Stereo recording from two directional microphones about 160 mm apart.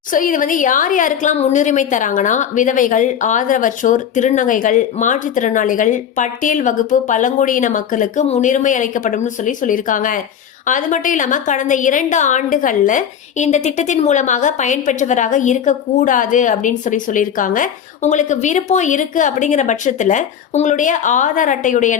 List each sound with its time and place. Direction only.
0.1 s a woman's voice: 55° left (ahead or behind)